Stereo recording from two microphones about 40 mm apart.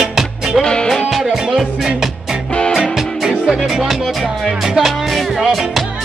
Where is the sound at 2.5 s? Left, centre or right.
Left.